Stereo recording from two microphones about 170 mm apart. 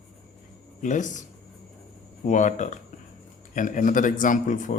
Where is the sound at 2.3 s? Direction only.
45° left (ahead or behind).